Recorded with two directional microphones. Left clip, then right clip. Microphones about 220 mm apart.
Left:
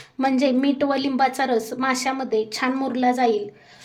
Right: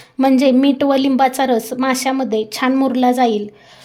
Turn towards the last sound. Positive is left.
turn(degrees=-35)  # may be behind; listen again after turning